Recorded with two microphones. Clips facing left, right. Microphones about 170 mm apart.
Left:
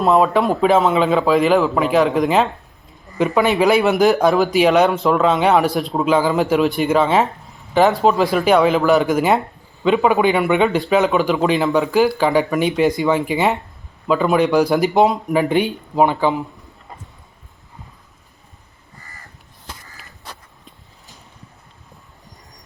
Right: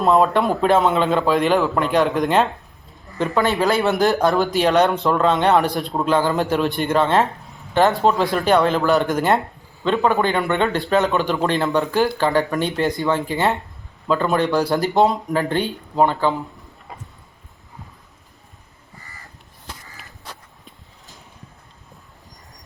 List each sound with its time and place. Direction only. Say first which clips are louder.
0.0 s speech: left 1 dB; 5° left (ahead or behind)
3.2 s speech: left 3 dB; 15° left (ahead or behind)
3.6 s speech: left 5 dB; 5° left (ahead or behind)
14.8 s speech: left 2 dB; centre (ahead or behind)
15.4 s speech: left 7 dB; 15° left (ahead or behind)